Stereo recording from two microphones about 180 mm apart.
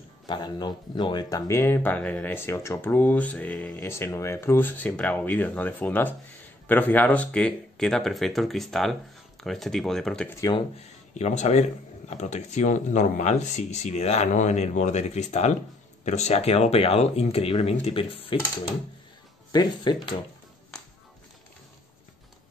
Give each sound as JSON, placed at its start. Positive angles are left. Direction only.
{"t": 0.3, "sound": "speech", "side_deg": 25}
{"t": 11.1, "sound": "speech", "side_deg": 40}